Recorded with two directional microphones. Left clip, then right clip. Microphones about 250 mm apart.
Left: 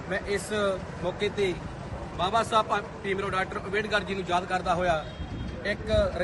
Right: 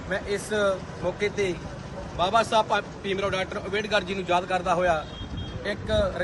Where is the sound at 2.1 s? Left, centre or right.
Right.